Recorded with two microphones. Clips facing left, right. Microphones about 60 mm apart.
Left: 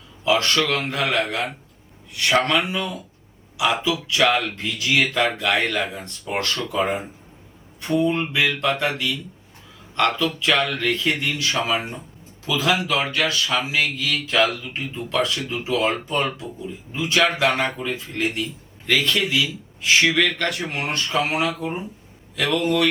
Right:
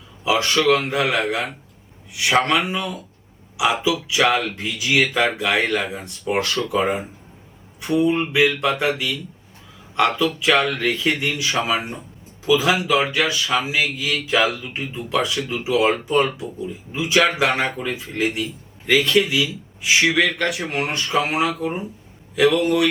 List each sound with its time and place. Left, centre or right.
0.3 s speech: centre
3.8 s speech: centre
7.8 s speech: centre